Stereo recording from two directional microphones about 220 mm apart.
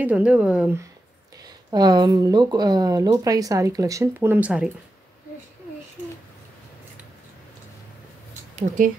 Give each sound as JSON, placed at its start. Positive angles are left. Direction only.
{"t": 0.0, "sound": "speech", "side_deg": -5}
{"t": 1.4, "sound": "speech", "side_deg": -20}
{"t": 8.5, "sound": "speech", "side_deg": -35}